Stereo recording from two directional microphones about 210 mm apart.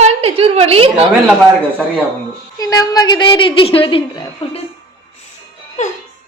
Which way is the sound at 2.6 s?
15° left (ahead or behind).